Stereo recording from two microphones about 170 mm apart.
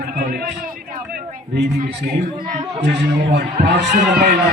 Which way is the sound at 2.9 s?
75° right (ahead or behind).